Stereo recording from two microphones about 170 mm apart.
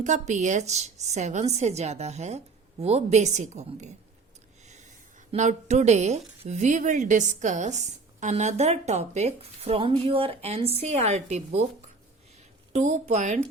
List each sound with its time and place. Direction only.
0.0 s a woman's voice: 45° right (ahead or behind)
5.3 s a woman's voice: 40° right (ahead or behind)
12.7 s a woman's voice: 40° right (ahead or behind)